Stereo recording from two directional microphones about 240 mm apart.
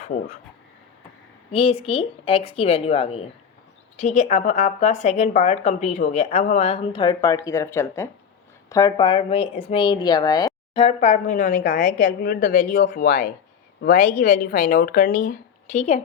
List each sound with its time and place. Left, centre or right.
0.1 s speech: left
1.5 s speech: left